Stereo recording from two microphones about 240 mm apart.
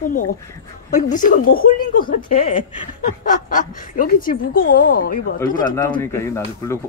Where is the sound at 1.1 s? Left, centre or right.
Left.